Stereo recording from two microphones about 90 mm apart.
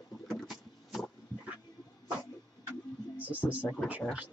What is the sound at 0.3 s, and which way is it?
Vehicle, centre (ahead or behind).